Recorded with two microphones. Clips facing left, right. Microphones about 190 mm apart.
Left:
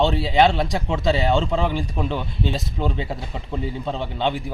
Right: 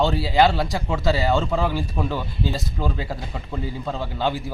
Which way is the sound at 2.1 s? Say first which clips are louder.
Left 1 dB; 20° left (ahead or behind).